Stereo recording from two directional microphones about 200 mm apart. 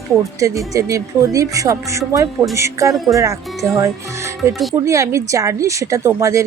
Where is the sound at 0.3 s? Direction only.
15° right (ahead or behind).